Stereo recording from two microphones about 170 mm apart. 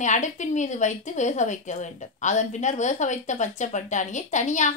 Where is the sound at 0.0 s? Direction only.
45° left (ahead or behind).